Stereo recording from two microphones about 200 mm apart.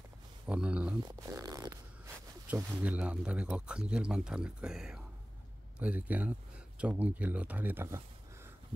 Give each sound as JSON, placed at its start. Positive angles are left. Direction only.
{"t": 0.5, "sound": "speech", "side_deg": -5}
{"t": 1.0, "sound": "a sound", "side_deg": -20}
{"t": 2.4, "sound": "speech", "side_deg": -10}